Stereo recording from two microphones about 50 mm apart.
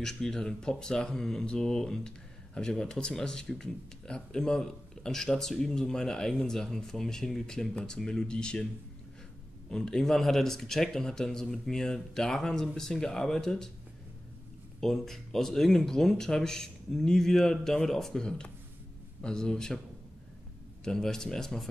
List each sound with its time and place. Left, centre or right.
0.0 s speech: centre
9.7 s speech: centre
14.8 s speech: centre
20.8 s speech: centre